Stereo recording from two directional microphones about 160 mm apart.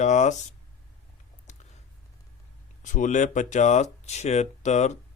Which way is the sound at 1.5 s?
45° left (ahead or behind).